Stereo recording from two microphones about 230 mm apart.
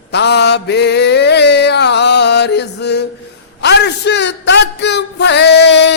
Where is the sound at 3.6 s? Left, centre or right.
Left.